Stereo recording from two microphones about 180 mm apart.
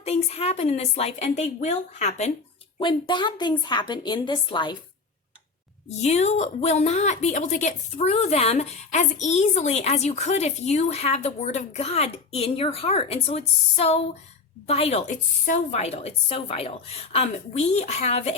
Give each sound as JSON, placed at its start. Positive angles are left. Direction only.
{"t": 0.0, "sound": "a woman's voice", "side_deg": 35}
{"t": 2.7, "sound": "a woman's voice", "side_deg": 25}
{"t": 5.9, "sound": "a woman's voice", "side_deg": 35}